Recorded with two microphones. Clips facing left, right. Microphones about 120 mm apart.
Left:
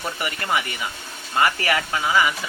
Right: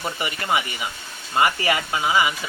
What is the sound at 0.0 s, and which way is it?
Speech, 20° right (ahead or behind).